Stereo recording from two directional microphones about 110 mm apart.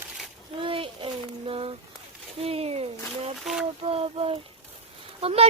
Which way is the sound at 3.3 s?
Centre (ahead or behind).